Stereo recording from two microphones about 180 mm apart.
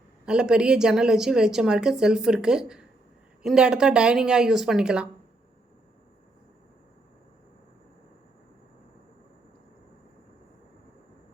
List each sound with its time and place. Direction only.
0.3 s a woman's voice: 5° right (ahead or behind)